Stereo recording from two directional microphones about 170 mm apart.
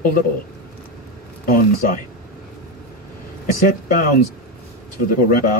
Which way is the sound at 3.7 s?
55° left (ahead or behind).